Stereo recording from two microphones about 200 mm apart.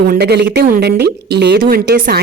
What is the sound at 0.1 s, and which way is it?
A woman's voice, 55° right (ahead or behind).